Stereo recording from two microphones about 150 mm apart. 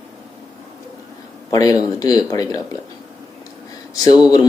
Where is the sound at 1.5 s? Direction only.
25° left (ahead or behind).